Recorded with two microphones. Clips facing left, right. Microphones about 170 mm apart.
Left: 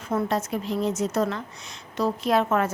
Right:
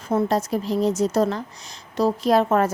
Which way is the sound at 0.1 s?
30° right (ahead or behind).